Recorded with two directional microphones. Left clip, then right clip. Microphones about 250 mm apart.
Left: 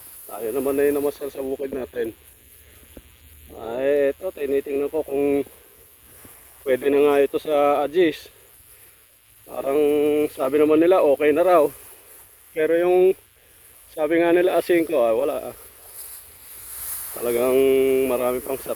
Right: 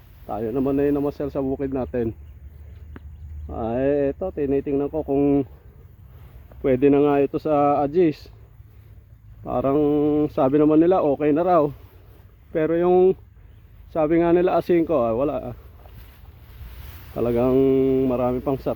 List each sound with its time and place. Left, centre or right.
0.3 s speech: centre
3.7 s speech: centre
6.7 s speech: centre
9.6 s speech: centre
17.2 s speech: centre